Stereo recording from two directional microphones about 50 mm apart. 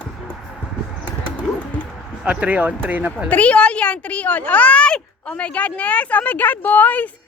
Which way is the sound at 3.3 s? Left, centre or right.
Left.